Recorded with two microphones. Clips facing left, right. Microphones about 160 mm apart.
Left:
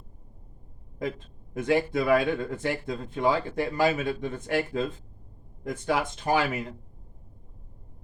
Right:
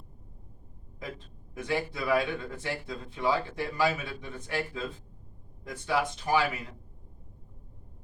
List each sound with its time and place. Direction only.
1.5 s speech: 50° left (ahead or behind)